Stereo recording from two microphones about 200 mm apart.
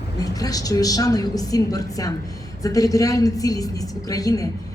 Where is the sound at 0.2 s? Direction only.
20° left (ahead or behind).